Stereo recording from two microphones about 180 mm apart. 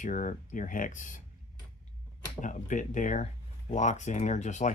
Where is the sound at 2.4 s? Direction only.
45° left (ahead or behind).